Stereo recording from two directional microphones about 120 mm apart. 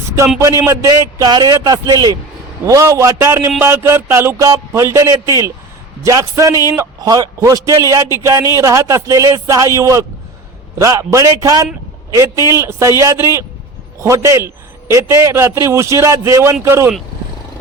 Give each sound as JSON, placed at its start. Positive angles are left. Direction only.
{"t": 0.3, "sound": "a man's voice", "side_deg": -25}
{"t": 1.2, "sound": "a man's voice", "side_deg": -35}